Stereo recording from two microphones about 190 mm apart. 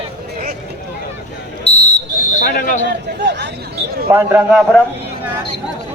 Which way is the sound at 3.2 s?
65° right (ahead or behind).